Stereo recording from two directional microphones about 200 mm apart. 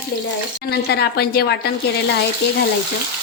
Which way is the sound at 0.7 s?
55° left (ahead or behind).